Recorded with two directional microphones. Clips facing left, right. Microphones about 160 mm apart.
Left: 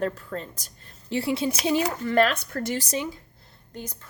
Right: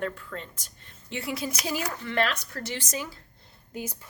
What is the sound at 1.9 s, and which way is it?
Speech, 40° left (ahead or behind).